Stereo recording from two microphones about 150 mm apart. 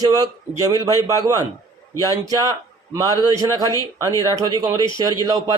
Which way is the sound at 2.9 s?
25° right (ahead or behind).